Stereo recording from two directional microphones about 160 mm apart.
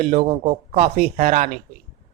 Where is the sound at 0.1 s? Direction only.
40° right (ahead or behind).